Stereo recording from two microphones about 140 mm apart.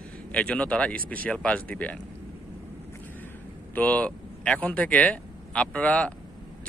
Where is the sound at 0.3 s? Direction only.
10° left (ahead or behind).